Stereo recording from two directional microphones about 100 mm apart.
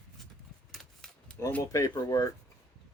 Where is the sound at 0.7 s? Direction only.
Centre (ahead or behind).